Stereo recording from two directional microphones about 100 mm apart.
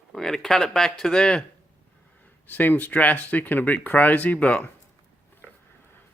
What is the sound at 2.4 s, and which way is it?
Speech, 20° left (ahead or behind).